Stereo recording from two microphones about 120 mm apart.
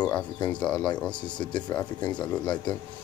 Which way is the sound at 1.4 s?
40° left (ahead or behind).